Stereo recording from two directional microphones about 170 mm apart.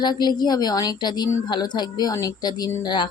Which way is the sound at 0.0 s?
25° left (ahead or behind).